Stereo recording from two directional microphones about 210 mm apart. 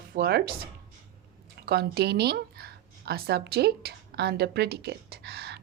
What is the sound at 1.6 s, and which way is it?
Speech, 50° right (ahead or behind).